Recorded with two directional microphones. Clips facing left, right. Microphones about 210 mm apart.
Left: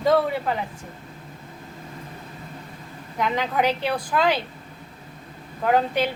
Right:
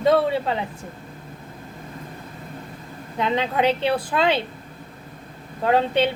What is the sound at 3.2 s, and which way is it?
Speech, 25° right (ahead or behind).